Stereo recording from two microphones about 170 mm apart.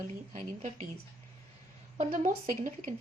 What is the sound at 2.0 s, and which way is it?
Speech, 45° right (ahead or behind).